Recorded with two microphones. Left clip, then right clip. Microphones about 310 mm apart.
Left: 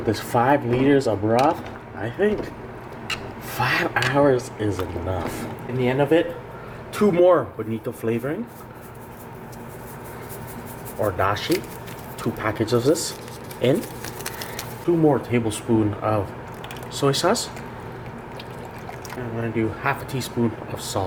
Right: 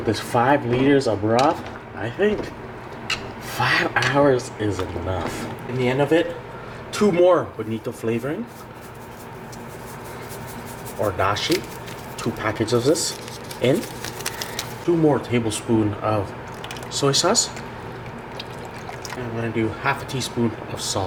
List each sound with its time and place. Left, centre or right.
0.0 s speech: centre
1.1 s speech: centre
2.0 s speech: centre
11.0 s speech: centre
13.6 s a sound: centre
15.1 s speech: centre
19.1 s speech: centre